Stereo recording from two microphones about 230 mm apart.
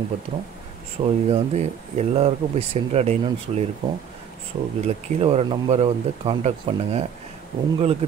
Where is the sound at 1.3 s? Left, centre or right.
Right.